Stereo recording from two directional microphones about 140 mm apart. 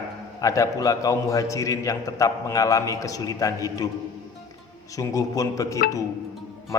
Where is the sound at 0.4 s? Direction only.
25° left (ahead or behind).